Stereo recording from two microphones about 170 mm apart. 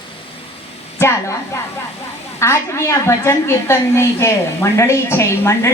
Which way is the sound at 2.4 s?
15° left (ahead or behind).